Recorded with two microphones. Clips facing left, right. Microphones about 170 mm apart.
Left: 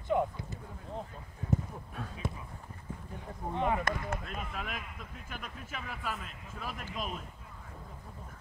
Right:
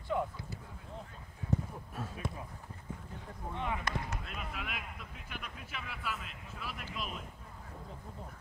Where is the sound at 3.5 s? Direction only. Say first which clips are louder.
Left 6 dB; 40° left (ahead or behind).